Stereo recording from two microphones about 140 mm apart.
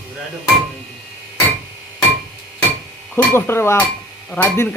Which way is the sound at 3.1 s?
15° left (ahead or behind).